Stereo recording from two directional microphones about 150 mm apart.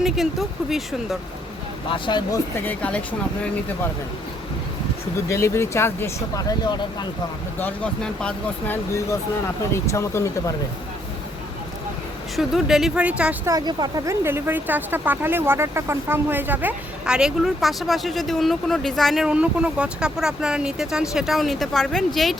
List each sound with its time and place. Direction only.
0.0 s speech: centre (ahead or behind)
1.9 s speech: 30° left (ahead or behind)
2.6 s speech: 10° left (ahead or behind)
5.3 s speech: 20° left (ahead or behind)
7.6 s speech: 5° left (ahead or behind)
12.4 s speech: centre (ahead or behind)
13.4 s speech: 25° right (ahead or behind); by 22.4 s centre (ahead or behind)